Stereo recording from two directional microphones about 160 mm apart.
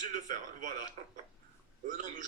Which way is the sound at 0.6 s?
50° right (ahead or behind).